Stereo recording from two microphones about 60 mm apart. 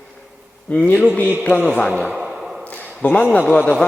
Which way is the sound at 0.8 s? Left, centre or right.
Left.